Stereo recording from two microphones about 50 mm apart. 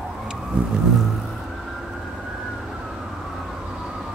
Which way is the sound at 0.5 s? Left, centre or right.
Right.